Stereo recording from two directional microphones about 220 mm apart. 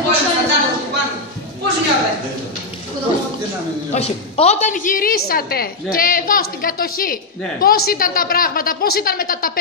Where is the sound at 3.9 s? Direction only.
30° left (ahead or behind).